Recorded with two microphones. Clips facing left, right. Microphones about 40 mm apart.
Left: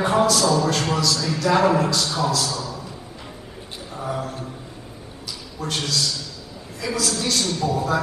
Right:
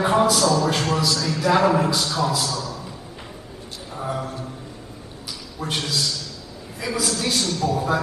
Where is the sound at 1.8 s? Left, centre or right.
Centre.